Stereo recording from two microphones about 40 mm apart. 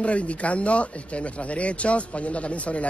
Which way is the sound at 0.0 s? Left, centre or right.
Left.